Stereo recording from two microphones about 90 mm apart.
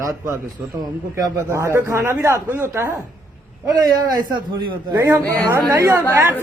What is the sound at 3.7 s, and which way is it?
A man's voice, 45° right (ahead or behind).